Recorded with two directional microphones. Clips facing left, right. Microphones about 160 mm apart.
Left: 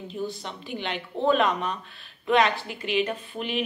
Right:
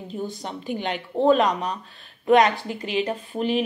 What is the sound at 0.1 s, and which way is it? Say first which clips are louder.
Speech: right 2 dB; 45° right (ahead or behind).